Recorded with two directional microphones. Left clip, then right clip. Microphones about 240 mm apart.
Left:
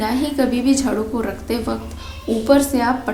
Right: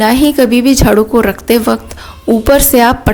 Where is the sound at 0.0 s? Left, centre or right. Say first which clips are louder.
Right 11 dB; right.